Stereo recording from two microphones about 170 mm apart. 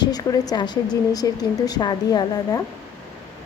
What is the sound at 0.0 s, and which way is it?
A woman's voice, 20° left (ahead or behind).